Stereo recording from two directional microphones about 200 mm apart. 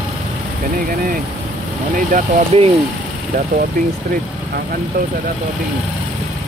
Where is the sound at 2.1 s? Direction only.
30° right (ahead or behind).